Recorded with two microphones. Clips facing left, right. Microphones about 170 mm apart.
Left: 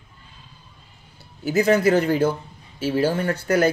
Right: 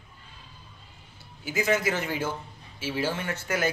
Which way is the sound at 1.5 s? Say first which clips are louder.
Left 8 dB; 40° left (ahead or behind).